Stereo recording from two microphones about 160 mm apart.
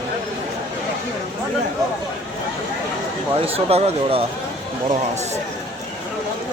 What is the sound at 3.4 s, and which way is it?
Speech, 40° right (ahead or behind).